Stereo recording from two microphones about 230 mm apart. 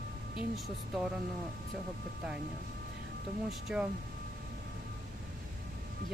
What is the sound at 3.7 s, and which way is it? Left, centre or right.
Speech, centre.